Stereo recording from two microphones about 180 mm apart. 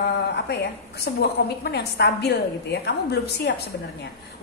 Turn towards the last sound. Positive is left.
turn(degrees=65)  # may be behind; listen again after turning